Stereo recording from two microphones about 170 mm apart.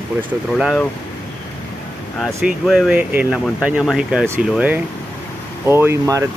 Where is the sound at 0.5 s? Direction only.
Centre (ahead or behind).